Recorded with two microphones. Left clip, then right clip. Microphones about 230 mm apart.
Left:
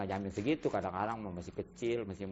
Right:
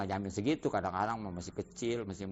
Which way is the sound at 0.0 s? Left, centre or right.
Right.